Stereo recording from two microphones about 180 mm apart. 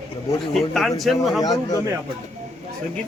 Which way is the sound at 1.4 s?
20° left (ahead or behind).